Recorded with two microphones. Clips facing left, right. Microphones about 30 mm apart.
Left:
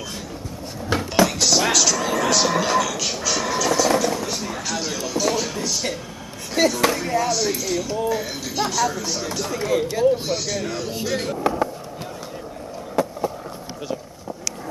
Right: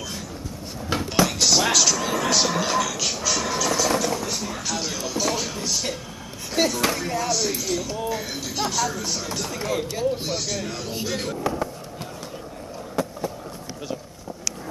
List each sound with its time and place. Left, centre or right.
0.8 s a sound: centre
6.5 s speech: centre
11.3 s speech: centre